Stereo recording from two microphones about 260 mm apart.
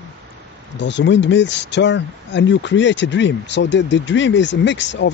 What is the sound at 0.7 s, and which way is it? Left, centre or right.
Speech, left.